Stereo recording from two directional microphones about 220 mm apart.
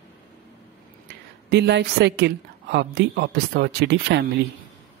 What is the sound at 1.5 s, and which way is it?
A woman's voice, 50° right (ahead or behind).